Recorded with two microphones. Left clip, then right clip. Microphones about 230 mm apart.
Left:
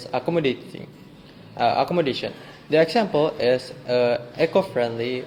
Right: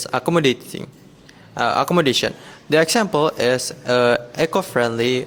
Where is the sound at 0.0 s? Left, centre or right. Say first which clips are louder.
Right 5 dB; right.